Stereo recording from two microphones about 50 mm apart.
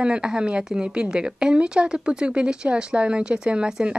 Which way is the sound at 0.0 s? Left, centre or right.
Centre.